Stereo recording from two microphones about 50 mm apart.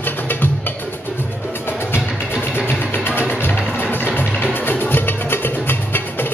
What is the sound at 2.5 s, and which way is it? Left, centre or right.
Music, left.